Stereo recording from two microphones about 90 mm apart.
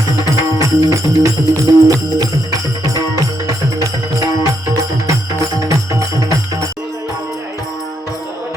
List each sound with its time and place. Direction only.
0.6 s music: 35° right (ahead or behind)
4.2 s music: 40° right (ahead or behind)